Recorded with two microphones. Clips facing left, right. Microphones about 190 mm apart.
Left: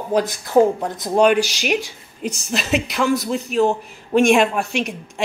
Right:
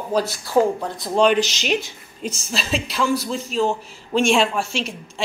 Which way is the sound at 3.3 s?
65° left (ahead or behind).